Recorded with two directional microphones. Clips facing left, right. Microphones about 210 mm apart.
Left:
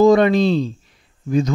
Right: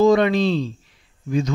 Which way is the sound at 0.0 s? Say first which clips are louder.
Left 3 dB; 40° left (ahead or behind).